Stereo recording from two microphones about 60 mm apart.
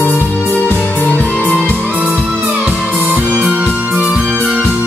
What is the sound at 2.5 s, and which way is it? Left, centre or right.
Music, centre.